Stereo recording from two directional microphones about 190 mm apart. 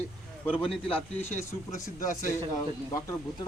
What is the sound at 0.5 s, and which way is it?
Speech, centre (ahead or behind).